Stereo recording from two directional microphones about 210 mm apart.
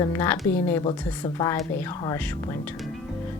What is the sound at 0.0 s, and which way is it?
Speech, 10° left (ahead or behind).